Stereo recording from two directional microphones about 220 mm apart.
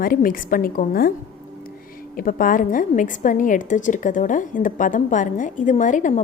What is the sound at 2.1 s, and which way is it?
A woman's voice, 40° left (ahead or behind).